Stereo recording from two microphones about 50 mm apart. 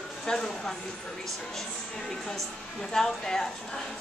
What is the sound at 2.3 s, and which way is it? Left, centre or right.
A woman's voice, centre.